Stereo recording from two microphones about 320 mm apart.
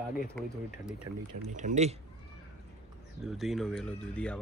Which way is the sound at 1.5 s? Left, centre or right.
Right.